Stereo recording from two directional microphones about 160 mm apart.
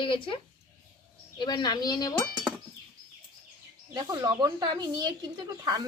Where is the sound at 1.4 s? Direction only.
25° left (ahead or behind).